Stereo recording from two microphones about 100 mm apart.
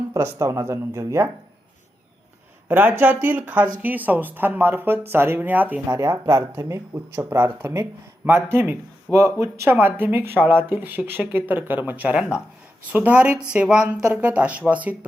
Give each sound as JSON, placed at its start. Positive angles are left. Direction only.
{"t": 0.1, "sound": "speech", "side_deg": -30}
{"t": 2.6, "sound": "speech", "side_deg": -20}
{"t": 5.9, "sound": "speech", "side_deg": -30}